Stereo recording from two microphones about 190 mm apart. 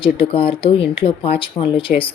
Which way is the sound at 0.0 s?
30° left (ahead or behind).